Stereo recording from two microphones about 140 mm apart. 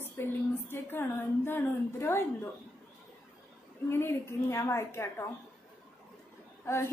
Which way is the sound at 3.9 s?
15° left (ahead or behind).